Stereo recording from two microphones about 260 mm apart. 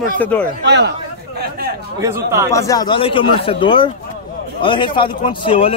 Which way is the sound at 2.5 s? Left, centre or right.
Centre.